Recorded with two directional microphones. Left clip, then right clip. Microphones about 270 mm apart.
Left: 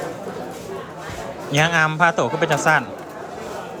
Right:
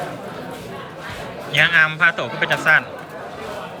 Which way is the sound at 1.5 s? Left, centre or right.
Centre.